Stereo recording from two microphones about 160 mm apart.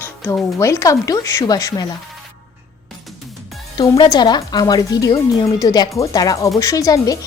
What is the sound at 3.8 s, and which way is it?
A woman's voice, 25° left (ahead or behind).